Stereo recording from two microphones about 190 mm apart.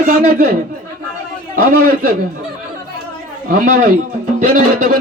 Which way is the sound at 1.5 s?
50° right (ahead or behind).